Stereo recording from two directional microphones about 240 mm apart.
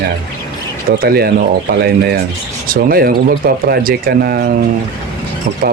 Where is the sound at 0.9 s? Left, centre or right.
Right.